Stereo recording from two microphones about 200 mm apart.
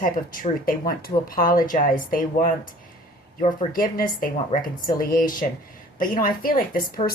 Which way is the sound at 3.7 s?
45° left (ahead or behind).